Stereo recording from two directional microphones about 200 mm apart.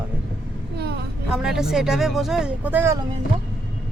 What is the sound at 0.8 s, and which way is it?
Speech, 55° right (ahead or behind).